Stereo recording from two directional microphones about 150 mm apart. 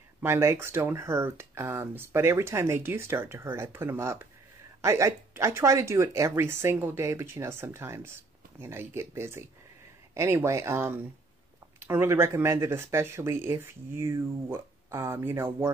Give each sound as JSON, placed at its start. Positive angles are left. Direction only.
{"t": 0.2, "sound": "speech", "side_deg": -20}